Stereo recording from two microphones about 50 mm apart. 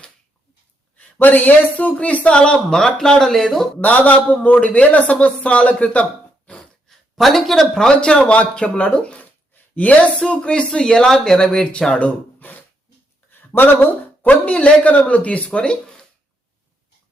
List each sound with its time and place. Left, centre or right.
0.9 s speech: left; by 3.7 s centre
3.8 s speech: left
6.6 s speech: centre
11.9 s gasp: left
13.3 s a sound: left
14.4 s speech: left